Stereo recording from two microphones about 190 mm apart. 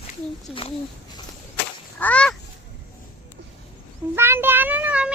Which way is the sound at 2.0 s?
5° left (ahead or behind).